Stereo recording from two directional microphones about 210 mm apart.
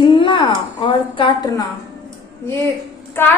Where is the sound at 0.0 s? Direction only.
25° left (ahead or behind).